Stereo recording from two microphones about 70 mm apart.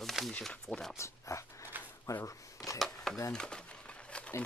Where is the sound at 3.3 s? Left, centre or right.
Centre.